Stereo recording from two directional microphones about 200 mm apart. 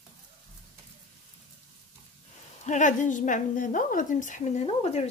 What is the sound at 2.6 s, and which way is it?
A woman's voice, 35° left (ahead or behind).